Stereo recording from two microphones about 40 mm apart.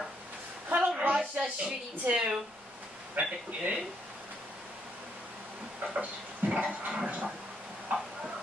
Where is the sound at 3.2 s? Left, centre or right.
Right.